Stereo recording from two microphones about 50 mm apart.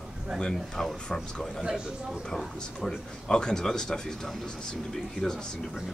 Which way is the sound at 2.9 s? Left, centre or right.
Centre.